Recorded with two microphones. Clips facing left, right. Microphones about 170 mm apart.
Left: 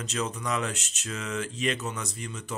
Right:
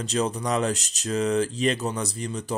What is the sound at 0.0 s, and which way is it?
Speech, 35° right (ahead or behind).